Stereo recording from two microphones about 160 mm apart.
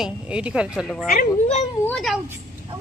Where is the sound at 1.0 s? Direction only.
60° left (ahead or behind).